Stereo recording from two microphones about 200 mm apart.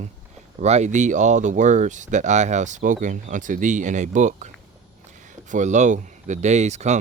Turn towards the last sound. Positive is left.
turn(degrees=-35)  # may be behind; listen again after turning